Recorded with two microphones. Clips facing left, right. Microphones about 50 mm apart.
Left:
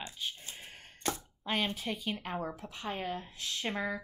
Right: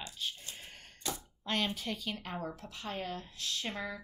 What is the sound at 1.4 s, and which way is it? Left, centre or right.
A woman's voice, centre.